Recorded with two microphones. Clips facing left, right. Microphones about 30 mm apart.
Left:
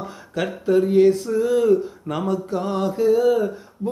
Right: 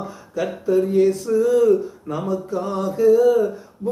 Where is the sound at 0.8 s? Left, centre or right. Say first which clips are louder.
Left 2 dB; left.